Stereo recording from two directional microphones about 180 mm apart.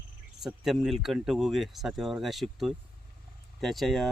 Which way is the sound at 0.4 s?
Centre (ahead or behind).